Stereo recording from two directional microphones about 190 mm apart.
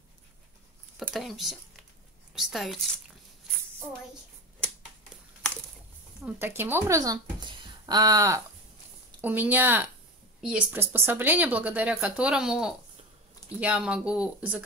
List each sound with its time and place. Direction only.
0.9 s a woman's voice: centre (ahead or behind)
6.2 s speech: 10° right (ahead or behind)